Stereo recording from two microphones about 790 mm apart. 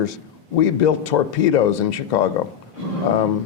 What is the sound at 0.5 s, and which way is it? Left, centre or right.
Speech, left.